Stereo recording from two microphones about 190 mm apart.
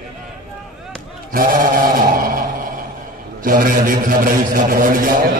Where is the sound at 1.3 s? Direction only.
45° right (ahead or behind).